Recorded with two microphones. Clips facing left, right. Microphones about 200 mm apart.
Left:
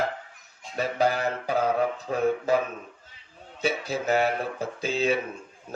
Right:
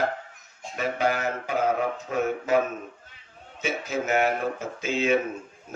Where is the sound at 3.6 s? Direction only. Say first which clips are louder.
Left 1 dB; 35° left (ahead or behind).